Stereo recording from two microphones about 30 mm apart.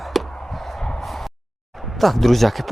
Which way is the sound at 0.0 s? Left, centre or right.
Centre.